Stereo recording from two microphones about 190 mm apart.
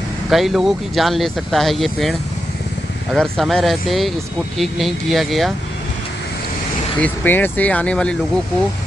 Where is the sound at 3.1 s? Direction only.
Centre (ahead or behind).